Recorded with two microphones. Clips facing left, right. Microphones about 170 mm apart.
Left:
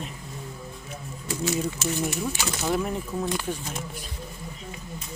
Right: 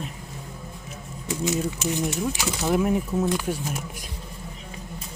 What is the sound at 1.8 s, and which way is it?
Speech, 15° right (ahead or behind).